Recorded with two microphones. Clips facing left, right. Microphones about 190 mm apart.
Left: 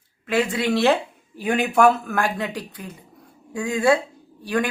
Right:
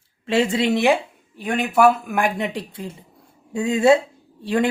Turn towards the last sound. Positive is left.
turn(degrees=-25)  # may be behind; listen again after turning